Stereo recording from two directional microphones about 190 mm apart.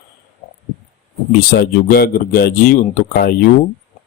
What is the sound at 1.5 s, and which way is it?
A man's voice, 55° left (ahead or behind).